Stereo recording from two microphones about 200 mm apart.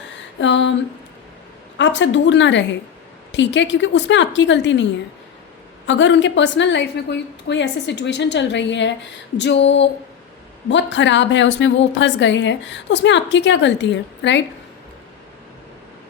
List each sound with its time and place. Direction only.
0.3 s a woman's voice: 65° left (ahead or behind)
1.8 s a woman's voice: 65° left (ahead or behind)